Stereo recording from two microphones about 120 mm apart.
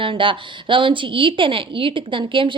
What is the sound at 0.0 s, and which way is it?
Speech, 45° right (ahead or behind).